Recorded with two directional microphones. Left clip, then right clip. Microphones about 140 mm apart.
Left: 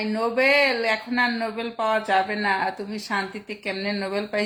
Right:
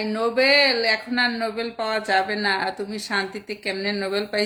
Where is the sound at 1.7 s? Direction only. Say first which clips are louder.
Left 1 dB; 10° right (ahead or behind).